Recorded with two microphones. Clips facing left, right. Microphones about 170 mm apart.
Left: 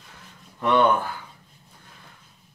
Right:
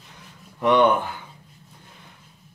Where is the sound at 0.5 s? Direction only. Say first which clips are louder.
Right 2 dB; 15° right (ahead or behind).